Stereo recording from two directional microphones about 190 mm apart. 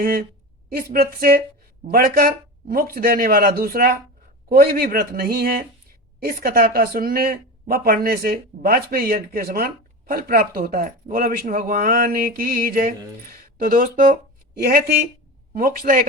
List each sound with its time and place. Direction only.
0.0 s speech: 50° right (ahead or behind)